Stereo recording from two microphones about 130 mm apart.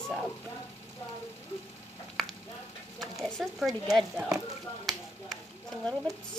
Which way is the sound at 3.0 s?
Centre (ahead or behind).